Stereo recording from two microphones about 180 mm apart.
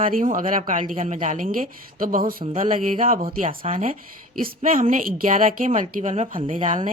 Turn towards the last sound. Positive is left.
turn(degrees=-45)  # may be behind; listen again after turning